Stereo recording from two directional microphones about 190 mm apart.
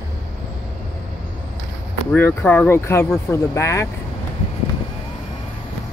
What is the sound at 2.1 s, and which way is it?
Speech, 10° left (ahead or behind).